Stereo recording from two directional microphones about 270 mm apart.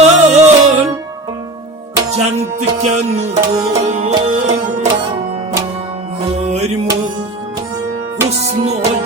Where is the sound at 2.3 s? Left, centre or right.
Right.